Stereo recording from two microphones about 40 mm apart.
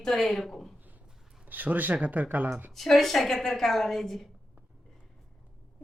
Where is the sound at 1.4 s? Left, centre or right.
Right.